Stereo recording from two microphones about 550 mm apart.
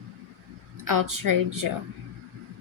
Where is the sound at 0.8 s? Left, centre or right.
Right.